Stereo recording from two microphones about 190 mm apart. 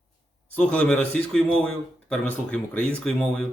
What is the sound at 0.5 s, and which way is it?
A man's voice, 5° left (ahead or behind).